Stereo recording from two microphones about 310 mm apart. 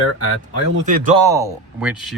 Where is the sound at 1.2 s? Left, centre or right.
Centre.